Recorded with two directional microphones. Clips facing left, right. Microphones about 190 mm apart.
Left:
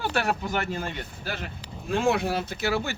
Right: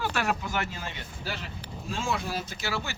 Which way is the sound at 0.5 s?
50° left (ahead or behind).